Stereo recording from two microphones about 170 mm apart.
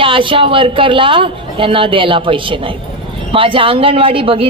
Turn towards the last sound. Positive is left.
turn(degrees=-35)  # may be behind; listen again after turning